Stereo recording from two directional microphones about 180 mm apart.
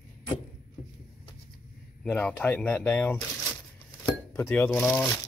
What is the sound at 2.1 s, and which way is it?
Speech, 10° left (ahead or behind).